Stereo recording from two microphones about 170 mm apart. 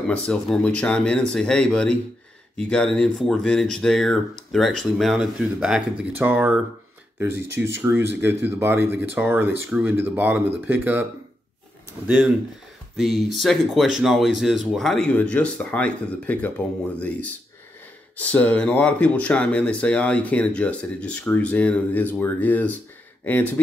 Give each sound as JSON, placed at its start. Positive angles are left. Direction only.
{"t": 0.1, "sound": "speech", "side_deg": 5}
{"t": 12.9, "sound": "speech", "side_deg": 0}
{"t": 18.1, "sound": "speech", "side_deg": 10}